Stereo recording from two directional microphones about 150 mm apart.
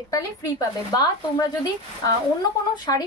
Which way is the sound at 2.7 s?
30° left (ahead or behind).